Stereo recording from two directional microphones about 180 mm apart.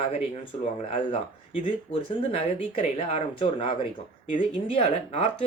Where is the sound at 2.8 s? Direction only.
30° left (ahead or behind).